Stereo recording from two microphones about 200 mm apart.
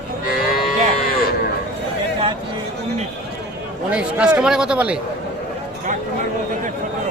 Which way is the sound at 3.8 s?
5° right (ahead or behind).